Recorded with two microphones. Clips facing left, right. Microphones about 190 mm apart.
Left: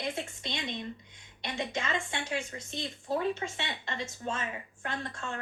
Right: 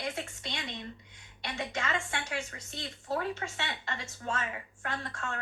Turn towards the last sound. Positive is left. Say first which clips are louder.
# even
turn(degrees=25)  # may be behind; listen again after turning